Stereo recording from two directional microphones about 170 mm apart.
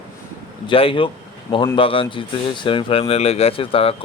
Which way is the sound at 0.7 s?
30° left (ahead or behind).